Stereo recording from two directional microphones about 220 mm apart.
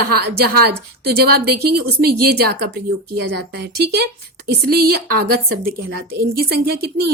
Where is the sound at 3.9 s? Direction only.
45° right (ahead or behind).